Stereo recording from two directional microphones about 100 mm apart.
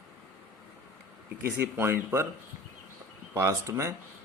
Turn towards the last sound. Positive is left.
turn(degrees=-30)  # may be behind; listen again after turning